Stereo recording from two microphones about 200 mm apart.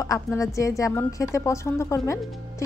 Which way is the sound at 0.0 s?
15° left (ahead or behind).